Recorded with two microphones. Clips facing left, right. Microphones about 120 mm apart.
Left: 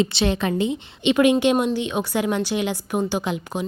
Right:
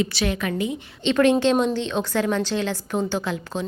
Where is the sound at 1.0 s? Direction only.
15° left (ahead or behind).